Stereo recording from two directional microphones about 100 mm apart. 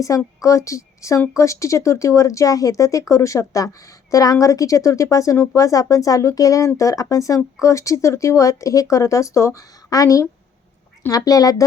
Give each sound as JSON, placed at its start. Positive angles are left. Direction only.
{"t": 0.1, "sound": "speech", "side_deg": 35}